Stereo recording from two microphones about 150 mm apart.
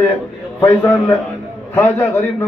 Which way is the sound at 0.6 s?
15° left (ahead or behind).